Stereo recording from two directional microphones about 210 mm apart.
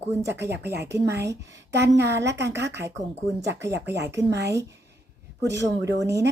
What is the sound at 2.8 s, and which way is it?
Speech, 15° right (ahead or behind).